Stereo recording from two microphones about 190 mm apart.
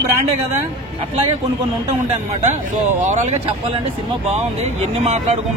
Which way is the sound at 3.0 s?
40° right (ahead or behind).